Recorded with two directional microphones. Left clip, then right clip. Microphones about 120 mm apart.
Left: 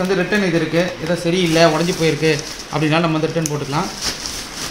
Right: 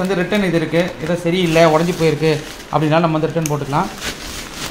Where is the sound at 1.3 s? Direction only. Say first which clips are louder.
Right 2 dB; 60° right (ahead or behind); by 3.8 s 45° right (ahead or behind).